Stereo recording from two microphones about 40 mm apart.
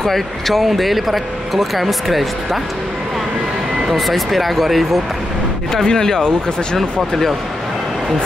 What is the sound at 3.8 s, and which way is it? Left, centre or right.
Speech, centre.